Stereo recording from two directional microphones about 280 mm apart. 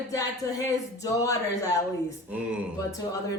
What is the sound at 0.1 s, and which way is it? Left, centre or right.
Speech, centre.